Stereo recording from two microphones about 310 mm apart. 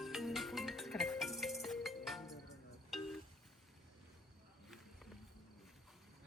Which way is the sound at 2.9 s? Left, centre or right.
Centre.